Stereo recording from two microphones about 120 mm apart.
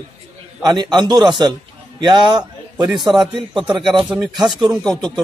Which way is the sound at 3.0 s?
40° right (ahead or behind).